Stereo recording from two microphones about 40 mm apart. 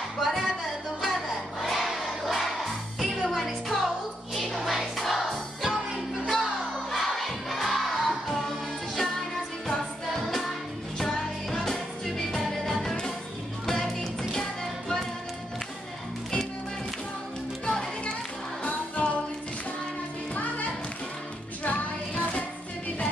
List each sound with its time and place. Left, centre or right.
0.2 s music: centre
6.9 s crowd: centre
8.3 s music: centre
14.3 s music: centre
17.6 s music: centre
18.6 s music: left
21.6 s child singing: left